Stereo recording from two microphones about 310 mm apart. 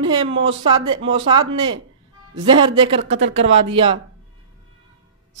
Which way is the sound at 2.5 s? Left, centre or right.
Centre.